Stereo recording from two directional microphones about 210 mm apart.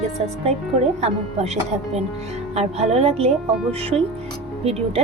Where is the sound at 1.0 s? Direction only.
30° right (ahead or behind).